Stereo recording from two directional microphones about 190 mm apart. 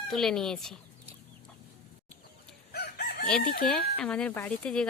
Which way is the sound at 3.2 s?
5° left (ahead or behind).